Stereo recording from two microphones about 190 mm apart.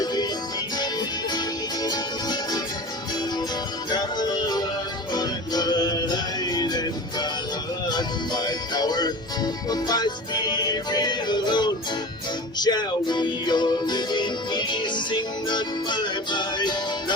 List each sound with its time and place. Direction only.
0.0 s music: 20° left (ahead or behind)
1.8 s music: 20° left (ahead or behind)
3.8 s music: 20° left (ahead or behind)